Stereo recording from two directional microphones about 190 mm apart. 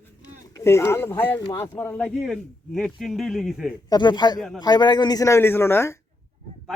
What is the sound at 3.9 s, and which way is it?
A man's voice, 25° left (ahead or behind).